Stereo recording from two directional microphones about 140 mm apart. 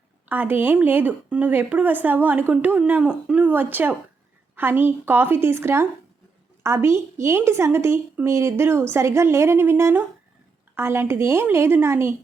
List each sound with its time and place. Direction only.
0.3 s a woman's voice: 15° right (ahead or behind)